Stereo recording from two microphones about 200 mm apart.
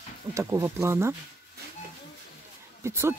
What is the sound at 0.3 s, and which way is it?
Speech, 15° right (ahead or behind).